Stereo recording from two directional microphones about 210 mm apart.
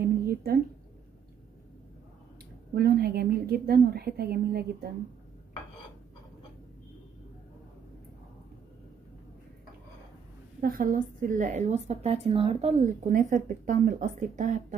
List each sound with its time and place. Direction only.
0.0 s a sound: 50° right (ahead or behind)
2.7 s a woman's voice: 45° right (ahead or behind)
10.6 s a woman's voice: 40° right (ahead or behind)